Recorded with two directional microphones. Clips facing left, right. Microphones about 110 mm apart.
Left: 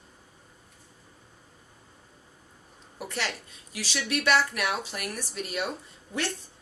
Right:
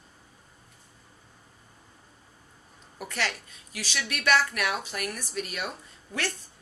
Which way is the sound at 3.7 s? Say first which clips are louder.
Left 4 dB; 30° left (ahead or behind).